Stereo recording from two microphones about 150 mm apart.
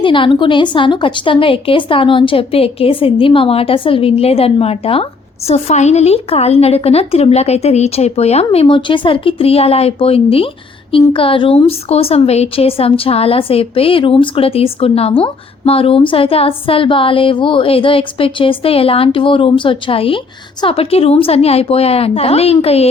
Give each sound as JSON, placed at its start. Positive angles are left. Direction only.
{"t": 0.0, "sound": "a woman's voice", "side_deg": 35}